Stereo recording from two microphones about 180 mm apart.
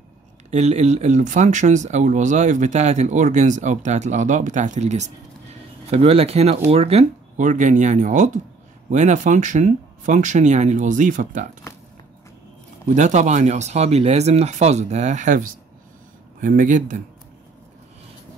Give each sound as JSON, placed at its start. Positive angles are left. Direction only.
{"t": 0.5, "sound": "speech", "side_deg": -40}
{"t": 12.9, "sound": "speech", "side_deg": -40}